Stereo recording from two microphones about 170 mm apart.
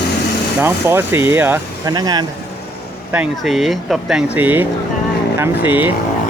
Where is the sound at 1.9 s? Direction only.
25° right (ahead or behind).